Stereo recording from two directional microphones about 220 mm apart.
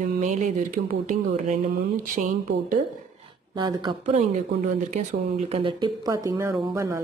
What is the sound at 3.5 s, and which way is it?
Speech, 20° right (ahead or behind).